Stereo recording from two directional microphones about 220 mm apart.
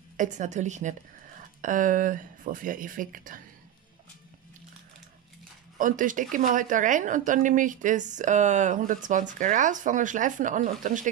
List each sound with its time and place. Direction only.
0.2 s speech: 35° right (ahead or behind)
5.8 s speech: 35° right (ahead or behind)